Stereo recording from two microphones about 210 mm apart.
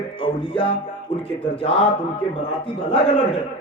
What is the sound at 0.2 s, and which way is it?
Music, 25° left (ahead or behind).